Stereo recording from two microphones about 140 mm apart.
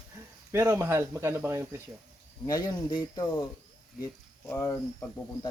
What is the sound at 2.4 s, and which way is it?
Speech, 25° left (ahead or behind).